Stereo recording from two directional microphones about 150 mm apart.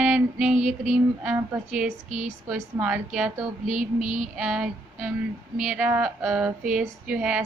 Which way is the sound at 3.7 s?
60° right (ahead or behind).